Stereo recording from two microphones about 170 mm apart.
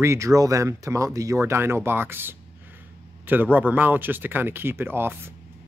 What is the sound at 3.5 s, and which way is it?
Speech, 10° right (ahead or behind).